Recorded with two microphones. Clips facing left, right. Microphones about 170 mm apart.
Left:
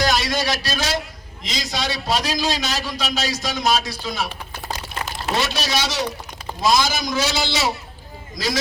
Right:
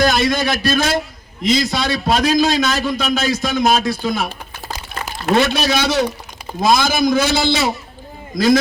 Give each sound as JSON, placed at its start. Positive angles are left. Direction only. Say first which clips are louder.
{"t": 0.0, "sound": "a man's voice", "louder": "right 5 dB", "side_deg": -55}